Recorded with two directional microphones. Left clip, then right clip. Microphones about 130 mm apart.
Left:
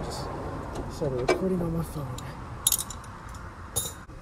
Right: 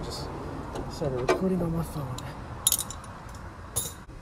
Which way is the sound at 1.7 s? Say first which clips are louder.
Even; 15° right (ahead or behind).